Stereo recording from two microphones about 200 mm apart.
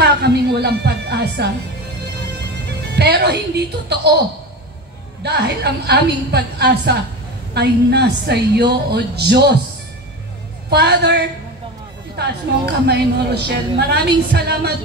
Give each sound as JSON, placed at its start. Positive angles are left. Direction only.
{"t": 0.0, "sound": "music", "side_deg": -55}
{"t": 3.0, "sound": "a woman's voice", "side_deg": -55}
{"t": 5.2, "sound": "a woman's voice", "side_deg": -55}
{"t": 10.7, "sound": "a woman's voice", "side_deg": -55}
{"t": 12.8, "sound": "a woman's voice", "side_deg": -55}